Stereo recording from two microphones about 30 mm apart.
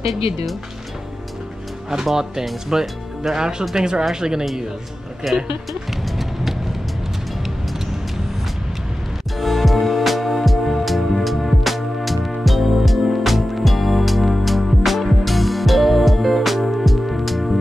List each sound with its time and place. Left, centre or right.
0.0 s speech: centre
2.7 s speech: centre
3.3 s speech: right
5.2 s music: centre
9.4 s music: centre